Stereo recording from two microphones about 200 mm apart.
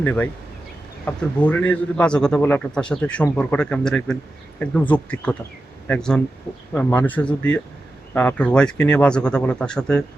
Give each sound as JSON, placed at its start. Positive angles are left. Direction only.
{"t": 0.0, "sound": "a man's voice", "side_deg": 10}